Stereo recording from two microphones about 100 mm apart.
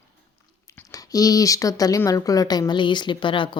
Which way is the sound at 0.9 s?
35° left (ahead or behind).